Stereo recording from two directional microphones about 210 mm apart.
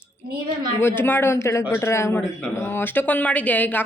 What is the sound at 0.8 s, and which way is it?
Speech, 10° left (ahead or behind).